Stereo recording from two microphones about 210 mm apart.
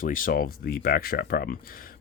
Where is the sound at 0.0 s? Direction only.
40° left (ahead or behind).